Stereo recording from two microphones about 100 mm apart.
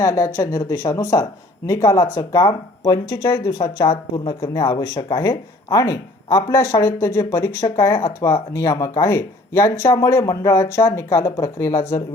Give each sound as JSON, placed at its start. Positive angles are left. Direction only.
{"t": 0.0, "sound": "speech", "side_deg": 30}